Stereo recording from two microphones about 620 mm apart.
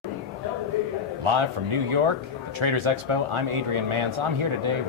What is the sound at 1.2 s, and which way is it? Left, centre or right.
Speech, right.